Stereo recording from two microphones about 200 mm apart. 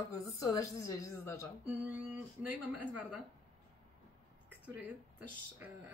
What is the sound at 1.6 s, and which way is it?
Speech, 5° right (ahead or behind).